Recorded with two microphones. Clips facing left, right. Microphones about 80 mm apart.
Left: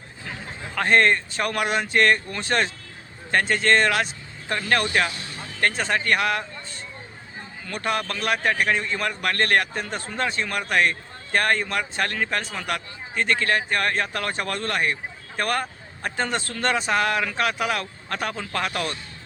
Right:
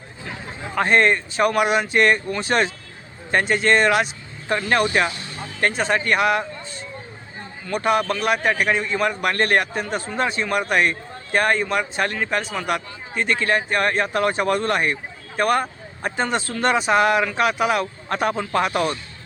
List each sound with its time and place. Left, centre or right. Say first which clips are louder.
0.8 s a man's voice: right 2 dB; centre